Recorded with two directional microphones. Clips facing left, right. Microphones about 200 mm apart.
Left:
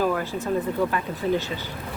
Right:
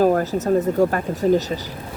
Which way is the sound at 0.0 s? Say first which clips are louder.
Right 7 dB; 45° right (ahead or behind).